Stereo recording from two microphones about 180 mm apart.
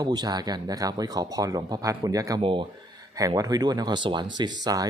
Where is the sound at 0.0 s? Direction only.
20° right (ahead or behind).